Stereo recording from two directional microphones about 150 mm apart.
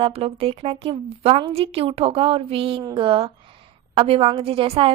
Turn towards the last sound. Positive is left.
turn(degrees=-40)  # may be behind; listen again after turning